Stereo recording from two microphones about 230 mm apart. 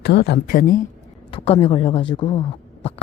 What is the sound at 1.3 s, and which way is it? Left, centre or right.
Speech, left.